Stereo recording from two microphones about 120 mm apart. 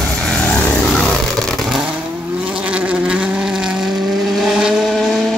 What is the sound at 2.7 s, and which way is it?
Insect, 10° right (ahead or behind).